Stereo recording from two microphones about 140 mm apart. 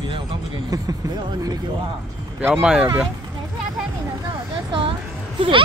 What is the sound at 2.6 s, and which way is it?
Speech, 5° right (ahead or behind).